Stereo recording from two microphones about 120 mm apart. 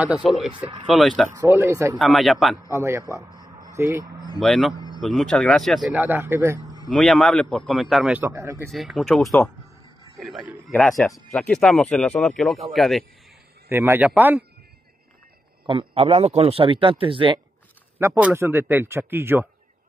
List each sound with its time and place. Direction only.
0.0 s a man's voice: 10° right (ahead or behind)
1.3 s a man's voice: 20° right (ahead or behind)
2.0 s speech: centre (ahead or behind)
2.7 s a man's voice: 25° right (ahead or behind)
3.3 s a sound: 25° right (ahead or behind)
4.0 s speech: 30° right (ahead or behind)
4.4 s speech: centre (ahead or behind)
5.9 s a man's voice: 15° right (ahead or behind)
6.9 s speech: centre (ahead or behind)
8.1 s a man's voice: 15° right (ahead or behind)
8.6 s a man's voice: centre (ahead or behind)
13.7 s a man's voice: 20° right (ahead or behind)
15.6 s a man's voice: 45° right (ahead or behind)
17.9 s a man's voice: 15° right (ahead or behind)